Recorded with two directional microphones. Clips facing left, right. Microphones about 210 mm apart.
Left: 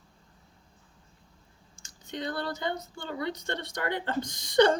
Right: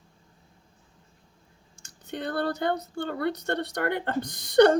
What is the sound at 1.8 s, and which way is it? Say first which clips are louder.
Speech: right 2 dB; 60° right (ahead or behind).